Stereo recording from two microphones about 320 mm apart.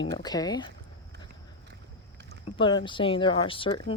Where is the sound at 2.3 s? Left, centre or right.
Centre.